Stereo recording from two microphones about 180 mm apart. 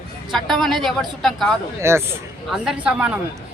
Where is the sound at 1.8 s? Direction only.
15° right (ahead or behind).